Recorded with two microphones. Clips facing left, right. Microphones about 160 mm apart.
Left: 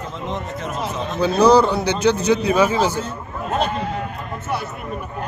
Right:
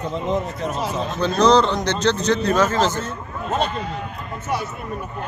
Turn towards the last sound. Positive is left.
turn(degrees=55)  # may be behind; listen again after turning